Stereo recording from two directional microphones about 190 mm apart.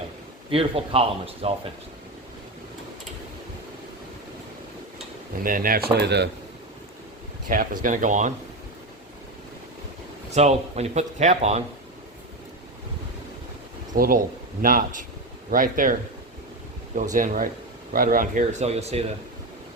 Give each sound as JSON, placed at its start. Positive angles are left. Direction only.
{"t": 0.5, "sound": "speech", "side_deg": -30}
{"t": 5.3, "sound": "speech", "side_deg": -45}
{"t": 7.4, "sound": "speech", "side_deg": -45}
{"t": 10.2, "sound": "speech", "side_deg": -35}
{"t": 13.9, "sound": "speech", "side_deg": -50}